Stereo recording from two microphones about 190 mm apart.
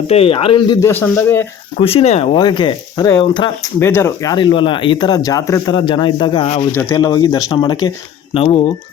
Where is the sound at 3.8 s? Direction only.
15° left (ahead or behind); by 6.6 s 30° left (ahead or behind).